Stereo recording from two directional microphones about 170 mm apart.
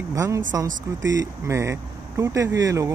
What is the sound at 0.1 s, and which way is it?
Speech, 20° right (ahead or behind).